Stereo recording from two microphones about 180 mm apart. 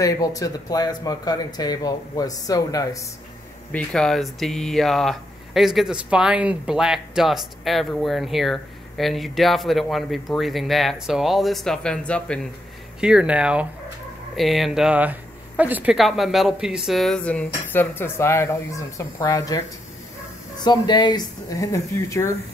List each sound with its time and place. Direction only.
0.0 s speech: 20° left (ahead or behind)
3.7 s speech: 5° left (ahead or behind)
13.0 s speech: 5° right (ahead or behind); by 19.6 s 20° left (ahead or behind)
20.6 s speech: 25° left (ahead or behind)